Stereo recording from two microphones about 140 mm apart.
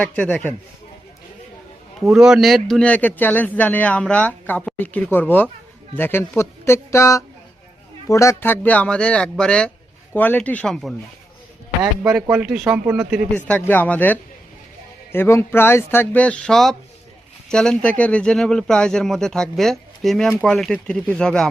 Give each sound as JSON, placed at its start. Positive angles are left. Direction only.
{"t": 0.0, "sound": "a man's voice", "side_deg": 10}
{"t": 2.0, "sound": "a man's voice", "side_deg": -5}
{"t": 12.3, "sound": "speech", "side_deg": -5}
{"t": 13.3, "sound": "a man's voice", "side_deg": 10}